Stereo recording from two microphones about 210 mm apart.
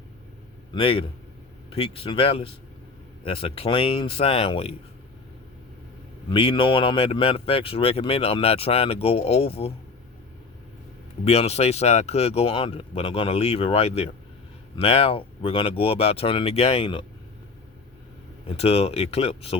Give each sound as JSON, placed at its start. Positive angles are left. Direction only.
{"t": 0.7, "sound": "speech", "side_deg": 25}
{"t": 6.3, "sound": "speech", "side_deg": 25}
{"t": 11.3, "sound": "speech", "side_deg": 30}
{"t": 18.4, "sound": "speech", "side_deg": 30}